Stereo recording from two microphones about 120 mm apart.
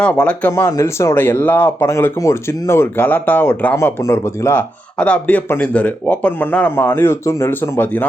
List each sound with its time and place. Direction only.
0.0 s speech: 10° left (ahead or behind)
0.5 s speech: 25° left (ahead or behind)
4.9 s speech: 10° left (ahead or behind)